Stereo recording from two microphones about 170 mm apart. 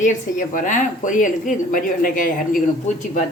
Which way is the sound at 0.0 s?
50° left (ahead or behind).